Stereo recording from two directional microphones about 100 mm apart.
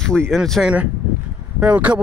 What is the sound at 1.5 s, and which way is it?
Speech, 15° right (ahead or behind).